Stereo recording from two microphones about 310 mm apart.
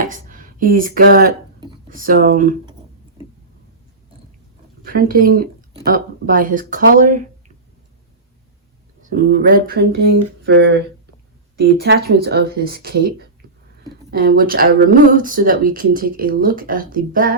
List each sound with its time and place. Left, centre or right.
0.0 s speech: right
4.9 s speech: right
9.0 s speech: right